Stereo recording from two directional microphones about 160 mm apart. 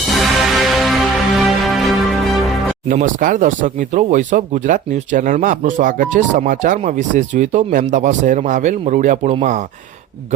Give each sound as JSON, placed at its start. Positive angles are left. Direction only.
{"t": 0.1, "sound": "music", "side_deg": 0}
{"t": 2.9, "sound": "speech", "side_deg": -60}